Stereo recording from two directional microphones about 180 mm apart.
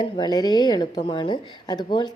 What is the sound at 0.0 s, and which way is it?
Speech, 25° left (ahead or behind).